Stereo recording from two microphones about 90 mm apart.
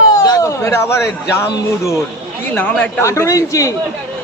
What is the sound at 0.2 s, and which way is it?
A man's voice, 40° left (ahead or behind).